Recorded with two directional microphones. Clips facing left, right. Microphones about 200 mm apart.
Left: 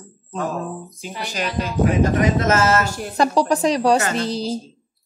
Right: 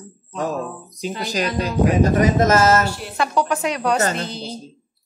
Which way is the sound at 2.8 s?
45° left (ahead or behind).